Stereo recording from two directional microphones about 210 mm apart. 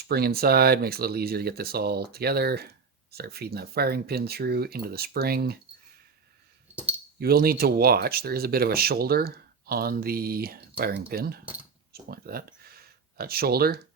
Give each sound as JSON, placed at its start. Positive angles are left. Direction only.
{"t": 0.1, "sound": "speech", "side_deg": -50}
{"t": 7.2, "sound": "speech", "side_deg": -45}
{"t": 11.9, "sound": "a sound", "side_deg": -45}